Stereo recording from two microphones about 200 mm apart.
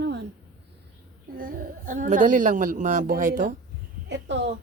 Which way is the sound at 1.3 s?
45° right (ahead or behind).